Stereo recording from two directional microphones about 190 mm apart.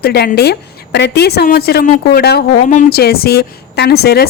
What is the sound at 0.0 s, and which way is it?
A woman's voice, 55° left (ahead or behind).